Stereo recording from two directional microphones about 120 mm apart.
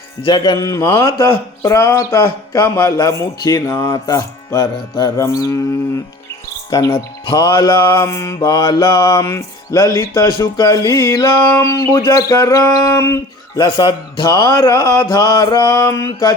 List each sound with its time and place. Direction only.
0.2 s speech: 40° left (ahead or behind)
7.3 s mantra: 40° left (ahead or behind)
7.7 s speech: 25° left (ahead or behind)
13.7 s mantra: 40° left (ahead or behind)